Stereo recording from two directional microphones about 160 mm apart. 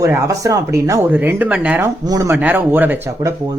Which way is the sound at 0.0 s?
20° right (ahead or behind).